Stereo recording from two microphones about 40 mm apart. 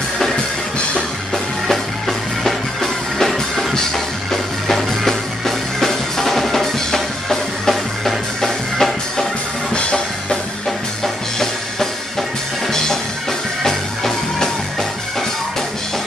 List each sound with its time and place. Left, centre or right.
1.3 s music: centre
9.8 s music: left
12.7 s music: centre